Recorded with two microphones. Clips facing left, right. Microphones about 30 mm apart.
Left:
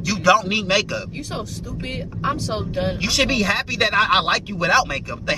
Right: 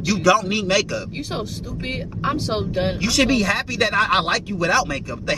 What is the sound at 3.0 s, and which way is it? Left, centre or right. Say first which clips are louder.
Speech: right 1 dB; centre.